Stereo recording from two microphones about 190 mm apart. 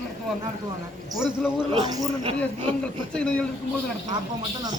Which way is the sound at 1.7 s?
25° right (ahead or behind).